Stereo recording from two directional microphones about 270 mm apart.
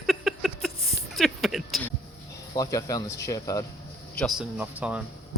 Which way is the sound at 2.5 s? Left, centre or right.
Centre.